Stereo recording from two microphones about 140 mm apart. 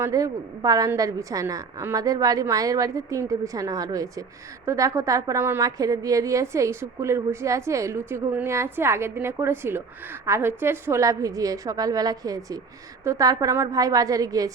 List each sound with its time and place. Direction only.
0.0 s a woman's voice: 25° right (ahead or behind)